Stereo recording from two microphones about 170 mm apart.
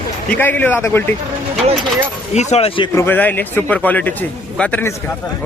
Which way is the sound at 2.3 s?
40° left (ahead or behind).